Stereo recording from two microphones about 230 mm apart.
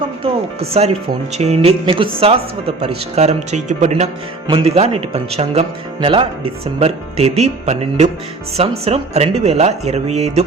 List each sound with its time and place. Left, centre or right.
1.4 s speech: right